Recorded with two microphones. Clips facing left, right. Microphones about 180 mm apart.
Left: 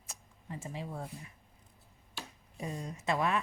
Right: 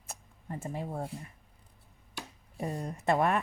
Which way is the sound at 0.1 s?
55° right (ahead or behind).